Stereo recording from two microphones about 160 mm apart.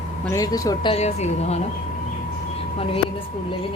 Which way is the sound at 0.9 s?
45° left (ahead or behind).